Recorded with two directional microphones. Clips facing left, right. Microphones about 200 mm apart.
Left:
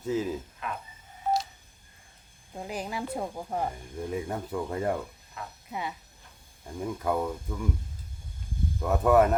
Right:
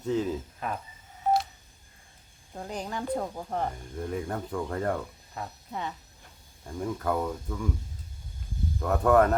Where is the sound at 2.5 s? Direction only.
5° left (ahead or behind).